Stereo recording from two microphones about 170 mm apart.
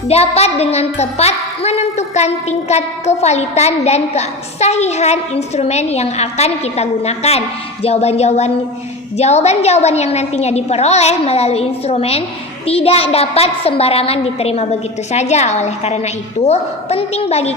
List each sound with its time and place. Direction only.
0.1 s a woman's voice: 35° left (ahead or behind)